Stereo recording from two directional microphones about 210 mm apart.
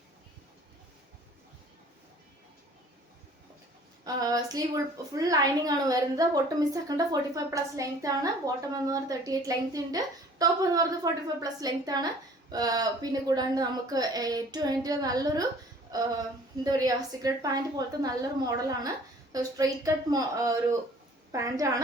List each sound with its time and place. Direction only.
4.0 s a woman's voice: 15° right (ahead or behind)